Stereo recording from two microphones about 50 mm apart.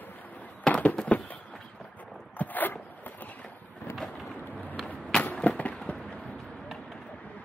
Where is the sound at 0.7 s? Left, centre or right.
Left.